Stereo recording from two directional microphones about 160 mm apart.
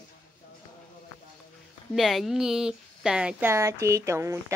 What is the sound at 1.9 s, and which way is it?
Speech, centre (ahead or behind).